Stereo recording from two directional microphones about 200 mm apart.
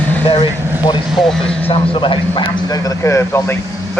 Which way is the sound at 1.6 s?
30° left (ahead or behind).